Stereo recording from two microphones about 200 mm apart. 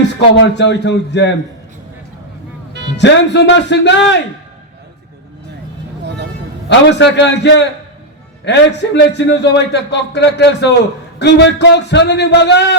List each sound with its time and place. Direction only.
0.3 s a man's voice: 60° left (ahead or behind)
3.0 s a man's voice: 60° left (ahead or behind)
6.7 s a man's voice: 60° left (ahead or behind)